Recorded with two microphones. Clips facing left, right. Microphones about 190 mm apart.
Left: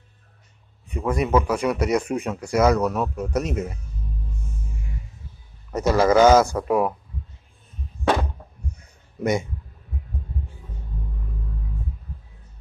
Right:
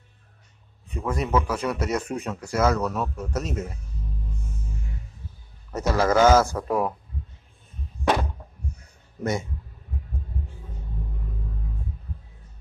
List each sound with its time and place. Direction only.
0.8 s speech: 10° left (ahead or behind)
5.7 s speech: 15° left (ahead or behind)
9.2 s speech: 15° left (ahead or behind)